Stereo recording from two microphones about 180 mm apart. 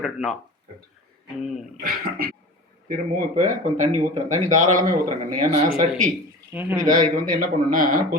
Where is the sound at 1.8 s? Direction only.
55° right (ahead or behind).